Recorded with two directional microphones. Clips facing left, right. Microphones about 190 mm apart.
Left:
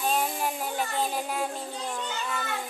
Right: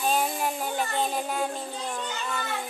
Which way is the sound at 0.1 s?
Centre (ahead or behind).